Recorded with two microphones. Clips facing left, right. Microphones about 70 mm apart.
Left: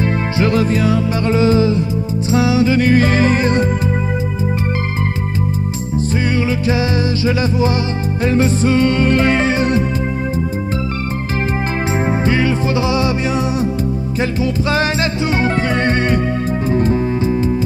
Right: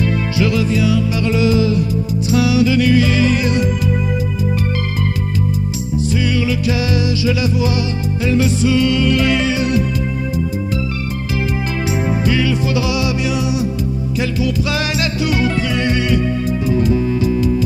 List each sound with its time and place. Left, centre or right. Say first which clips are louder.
0.4 s music: left 2 dB; left
8.3 s music: left 1 dB; left
12.3 s music: even; left
14.4 s music: left 5 dB; left